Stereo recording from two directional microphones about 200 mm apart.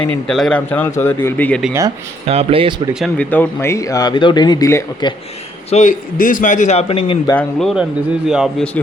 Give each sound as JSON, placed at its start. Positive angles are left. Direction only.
{"t": 0.3, "sound": "speech", "side_deg": 0}
{"t": 2.2, "sound": "speech", "side_deg": -30}
{"t": 2.9, "sound": "speech", "side_deg": 5}
{"t": 5.7, "sound": "speech", "side_deg": 40}
{"t": 7.3, "sound": "a man's voice", "side_deg": 0}